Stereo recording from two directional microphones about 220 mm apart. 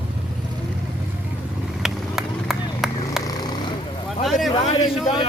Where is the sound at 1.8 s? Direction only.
Centre (ahead or behind).